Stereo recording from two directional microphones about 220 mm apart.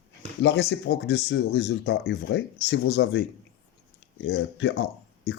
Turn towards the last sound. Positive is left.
turn(degrees=50)  # may be behind; listen again after turning